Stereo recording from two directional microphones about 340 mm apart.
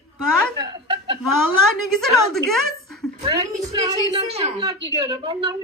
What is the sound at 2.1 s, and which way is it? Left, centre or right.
Speech, centre.